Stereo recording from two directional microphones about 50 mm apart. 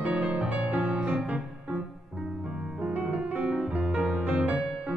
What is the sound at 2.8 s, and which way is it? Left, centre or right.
Music, right.